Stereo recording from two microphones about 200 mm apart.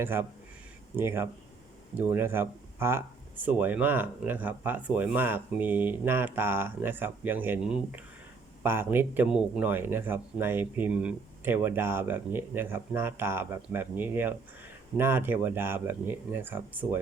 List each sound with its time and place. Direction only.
0.0 s speech: 10° right (ahead or behind)